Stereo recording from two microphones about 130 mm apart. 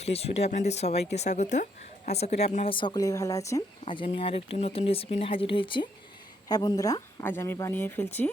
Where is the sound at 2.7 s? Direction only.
40° left (ahead or behind).